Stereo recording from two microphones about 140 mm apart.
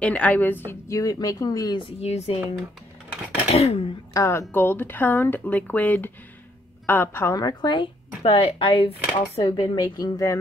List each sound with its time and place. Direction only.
0.0 s speech: 10° left (ahead or behind)
0.7 s a woman's voice: 20° left (ahead or behind); by 2.4 s 50° left (ahead or behind)
3.4 s a sound: 45° left (ahead or behind)
4.1 s a woman's voice: 20° left (ahead or behind)
8.2 s a woman's voice: 40° left (ahead or behind); by 10.4 s 25° left (ahead or behind)